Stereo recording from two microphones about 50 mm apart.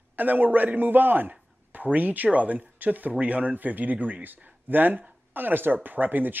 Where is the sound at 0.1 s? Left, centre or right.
Right.